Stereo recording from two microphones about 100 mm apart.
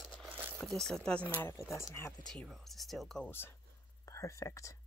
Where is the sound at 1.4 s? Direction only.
25° left (ahead or behind).